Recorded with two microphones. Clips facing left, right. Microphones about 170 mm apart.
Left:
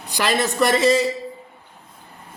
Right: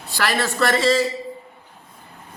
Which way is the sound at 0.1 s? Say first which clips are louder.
Left 2 dB; 20° left (ahead or behind).